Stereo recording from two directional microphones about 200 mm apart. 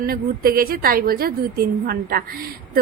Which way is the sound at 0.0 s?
45° right (ahead or behind).